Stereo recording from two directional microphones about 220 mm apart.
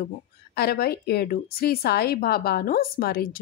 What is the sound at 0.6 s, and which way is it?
A woman's voice, 45° left (ahead or behind).